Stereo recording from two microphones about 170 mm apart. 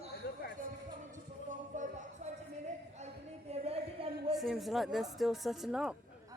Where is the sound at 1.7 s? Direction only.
45° right (ahead or behind).